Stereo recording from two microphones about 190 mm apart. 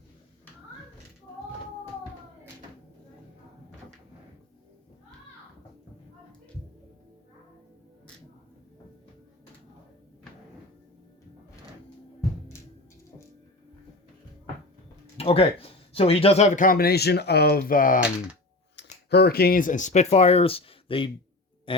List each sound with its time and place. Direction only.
15.2 s speech: 30° left (ahead or behind); by 18.0 s 45° left (ahead or behind)
18.8 s speech: 60° left (ahead or behind); by 21.8 s 25° left (ahead or behind)